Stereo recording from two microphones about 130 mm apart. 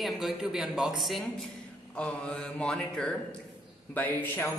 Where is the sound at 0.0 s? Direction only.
5° right (ahead or behind); by 4.6 s 15° left (ahead or behind).